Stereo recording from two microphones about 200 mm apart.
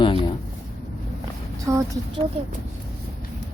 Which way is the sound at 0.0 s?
25° left (ahead or behind).